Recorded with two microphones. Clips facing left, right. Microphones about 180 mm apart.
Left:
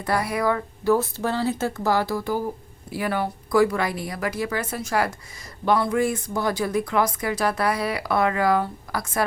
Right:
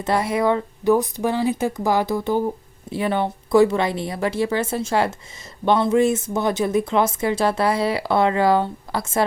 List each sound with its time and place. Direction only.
0.0 s speech: 25° right (ahead or behind)